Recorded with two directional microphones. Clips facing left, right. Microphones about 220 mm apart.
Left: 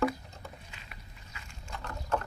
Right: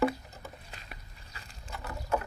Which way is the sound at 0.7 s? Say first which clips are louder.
Right 2 dB; 35° right (ahead or behind).